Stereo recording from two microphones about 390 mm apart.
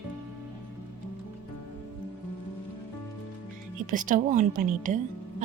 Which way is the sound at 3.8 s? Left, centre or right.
Centre.